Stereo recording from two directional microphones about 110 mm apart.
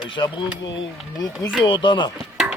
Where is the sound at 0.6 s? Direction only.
40° left (ahead or behind).